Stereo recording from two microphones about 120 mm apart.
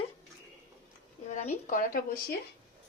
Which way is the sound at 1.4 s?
85° left.